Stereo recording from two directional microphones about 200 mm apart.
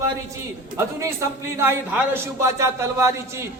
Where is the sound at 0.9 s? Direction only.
15° right (ahead or behind).